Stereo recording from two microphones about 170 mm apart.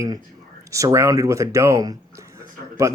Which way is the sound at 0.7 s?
20° right (ahead or behind).